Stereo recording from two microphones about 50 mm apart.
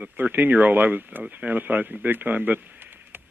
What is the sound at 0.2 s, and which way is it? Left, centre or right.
A man's voice, right.